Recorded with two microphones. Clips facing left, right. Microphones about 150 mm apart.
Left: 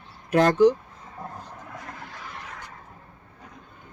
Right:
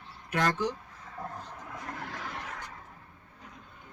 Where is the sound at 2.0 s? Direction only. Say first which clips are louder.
Right 2 dB; 90° right.